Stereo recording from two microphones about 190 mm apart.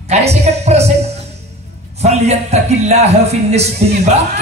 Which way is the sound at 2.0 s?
35° right (ahead or behind).